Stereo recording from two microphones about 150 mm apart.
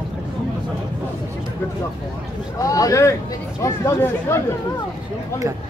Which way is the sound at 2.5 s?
20° left (ahead or behind).